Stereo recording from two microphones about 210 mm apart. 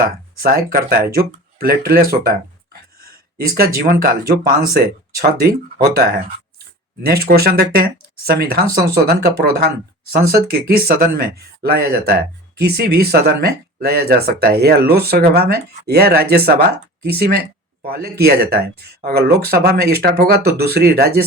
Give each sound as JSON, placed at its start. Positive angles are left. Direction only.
{"t": 0.0, "sound": "speech", "side_deg": -45}